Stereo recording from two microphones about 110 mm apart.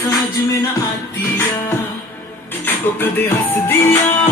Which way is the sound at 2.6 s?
20° left (ahead or behind).